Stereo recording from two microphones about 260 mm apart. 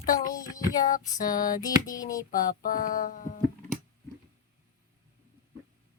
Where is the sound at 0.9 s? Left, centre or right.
Left.